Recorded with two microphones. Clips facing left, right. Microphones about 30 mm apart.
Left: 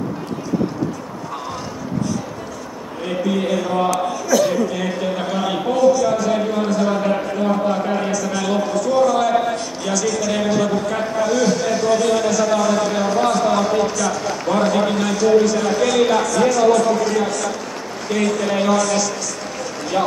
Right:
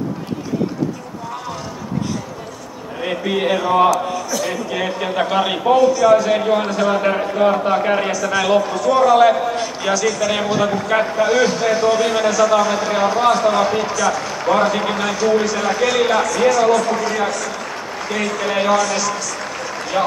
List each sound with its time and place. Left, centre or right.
3.0 s a man's voice: right
3.9 s a man's voice: centre
4.6 s a man's voice: right
8.1 s a man's voice: right
9.0 s a man's voice: right
9.3 s a man's voice: centre